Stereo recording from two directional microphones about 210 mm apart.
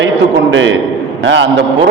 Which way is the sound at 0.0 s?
60° right (ahead or behind).